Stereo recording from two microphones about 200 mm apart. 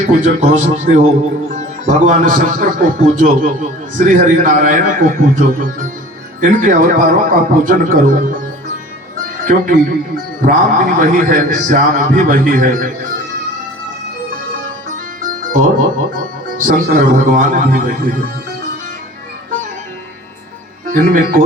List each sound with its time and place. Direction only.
0.0 s a man's voice: 35° right (ahead or behind)
9.5 s a man's voice: 45° right (ahead or behind)
15.2 s music: 45° right (ahead or behind)
16.6 s a man's voice: 40° right (ahead or behind)
20.8 s speech: 45° right (ahead or behind)